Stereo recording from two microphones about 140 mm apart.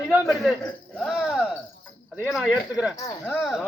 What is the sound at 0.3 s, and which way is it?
A man's voice, centre (ahead or behind).